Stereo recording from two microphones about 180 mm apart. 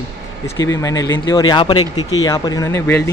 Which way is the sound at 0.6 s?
20° left (ahead or behind).